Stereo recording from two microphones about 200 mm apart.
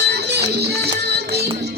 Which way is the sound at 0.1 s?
55° right (ahead or behind).